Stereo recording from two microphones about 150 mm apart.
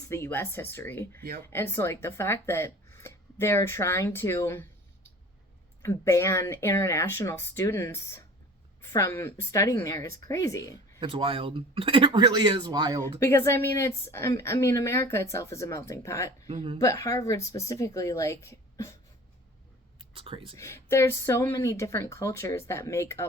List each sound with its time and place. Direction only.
0.1 s speech: 15° left (ahead or behind)
5.8 s a woman's voice: 20° left (ahead or behind)
11.0 s speech: 35° right (ahead or behind)
13.1 s a woman's voice: 20° left (ahead or behind)
16.5 s speech: 35° right (ahead or behind)
16.8 s a woman's voice: 20° left (ahead or behind)
20.0 s speech: 35° right (ahead or behind)
20.6 s a woman's voice: 20° left (ahead or behind)